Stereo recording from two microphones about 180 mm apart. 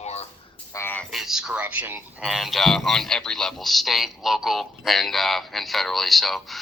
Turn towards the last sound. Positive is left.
turn(degrees=0)  # may be behind; listen again after turning